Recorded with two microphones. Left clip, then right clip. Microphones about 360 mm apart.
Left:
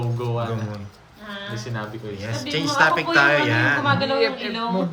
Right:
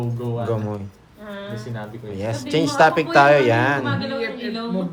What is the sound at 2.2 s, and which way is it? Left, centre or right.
A man's voice, centre.